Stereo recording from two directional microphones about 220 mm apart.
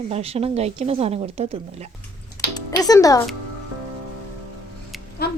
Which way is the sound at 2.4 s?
15° left (ahead or behind).